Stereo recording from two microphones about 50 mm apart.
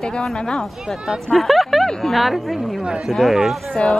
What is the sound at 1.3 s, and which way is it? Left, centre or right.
Speech, centre.